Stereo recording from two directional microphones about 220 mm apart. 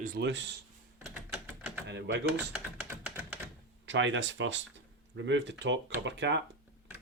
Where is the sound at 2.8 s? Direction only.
5° right (ahead or behind).